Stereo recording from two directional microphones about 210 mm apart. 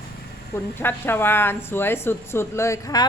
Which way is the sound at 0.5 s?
10° left (ahead or behind).